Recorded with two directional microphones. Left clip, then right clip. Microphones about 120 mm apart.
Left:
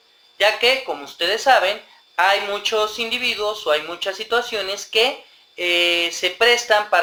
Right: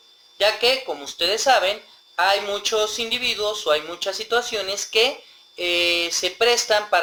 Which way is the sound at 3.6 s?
30° right (ahead or behind).